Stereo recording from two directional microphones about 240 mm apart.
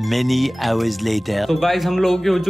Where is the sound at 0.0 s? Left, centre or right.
Centre.